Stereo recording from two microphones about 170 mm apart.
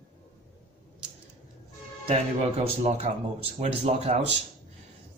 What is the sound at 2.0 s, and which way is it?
Speech, 40° right (ahead or behind).